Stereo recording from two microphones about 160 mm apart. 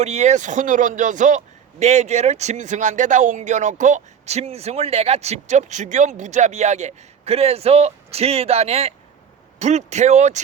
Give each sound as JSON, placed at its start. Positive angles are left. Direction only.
{"t": 0.0, "sound": "speech", "side_deg": -45}